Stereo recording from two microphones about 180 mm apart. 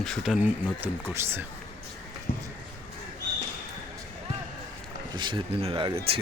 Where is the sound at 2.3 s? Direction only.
55° left (ahead or behind).